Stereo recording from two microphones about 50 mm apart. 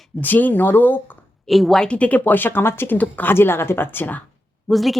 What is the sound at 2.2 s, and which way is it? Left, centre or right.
Speech, left.